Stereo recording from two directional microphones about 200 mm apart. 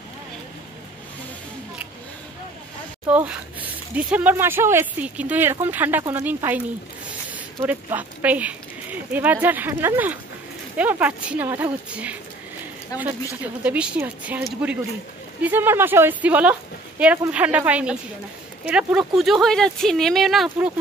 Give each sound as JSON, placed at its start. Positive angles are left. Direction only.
{"t": 3.1, "sound": "speech", "side_deg": -5}
{"t": 12.9, "sound": "speech", "side_deg": 15}
{"t": 13.7, "sound": "speech", "side_deg": -5}